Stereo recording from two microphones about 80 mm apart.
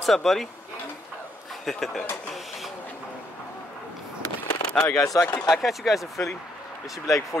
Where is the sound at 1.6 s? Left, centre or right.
Centre.